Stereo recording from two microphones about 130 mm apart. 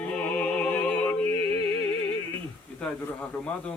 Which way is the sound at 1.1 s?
15° left (ahead or behind).